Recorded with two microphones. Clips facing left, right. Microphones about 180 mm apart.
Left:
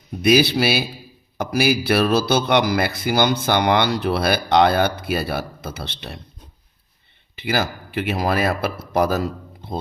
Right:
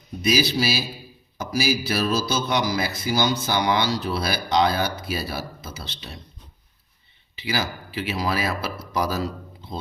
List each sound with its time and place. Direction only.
0.2 s speech: 60° left (ahead or behind)
7.3 s speech: 50° left (ahead or behind)